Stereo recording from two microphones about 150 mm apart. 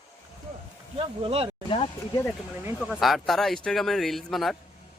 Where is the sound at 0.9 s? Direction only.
40° right (ahead or behind).